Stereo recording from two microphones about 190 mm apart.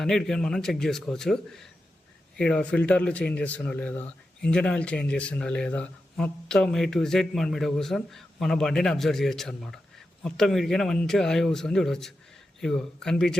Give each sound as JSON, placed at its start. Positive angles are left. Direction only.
{"t": 0.0, "sound": "speech", "side_deg": 5}